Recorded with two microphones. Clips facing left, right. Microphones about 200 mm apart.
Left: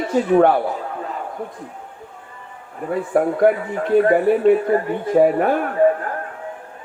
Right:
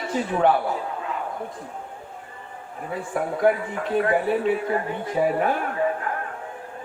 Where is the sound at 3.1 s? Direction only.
55° left (ahead or behind).